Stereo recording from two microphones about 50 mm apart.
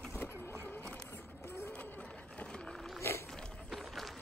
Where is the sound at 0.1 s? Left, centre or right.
Left.